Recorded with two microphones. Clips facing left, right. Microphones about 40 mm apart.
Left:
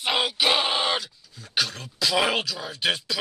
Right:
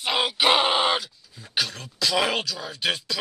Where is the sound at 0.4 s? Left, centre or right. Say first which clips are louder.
Right 6 dB; centre.